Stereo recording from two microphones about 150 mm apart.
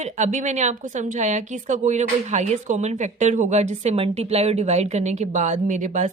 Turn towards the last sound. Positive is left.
turn(degrees=-55)  # may be behind; listen again after turning